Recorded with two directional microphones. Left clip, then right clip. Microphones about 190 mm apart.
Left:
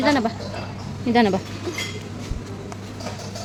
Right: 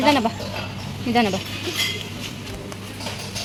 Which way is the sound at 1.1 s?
20° left (ahead or behind).